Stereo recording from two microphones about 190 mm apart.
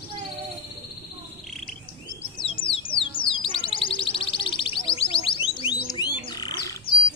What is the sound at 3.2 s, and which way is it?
Music, 25° left (ahead or behind).